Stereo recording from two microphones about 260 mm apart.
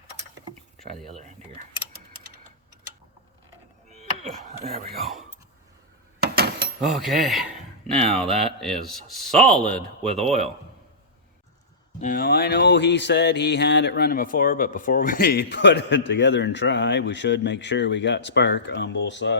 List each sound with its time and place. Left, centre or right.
3.8 s chop: right
4.6 s speech: right
5.0 s speech: centre
6.1 s a sound: right
6.8 s speech: centre
11.9 s a sound: left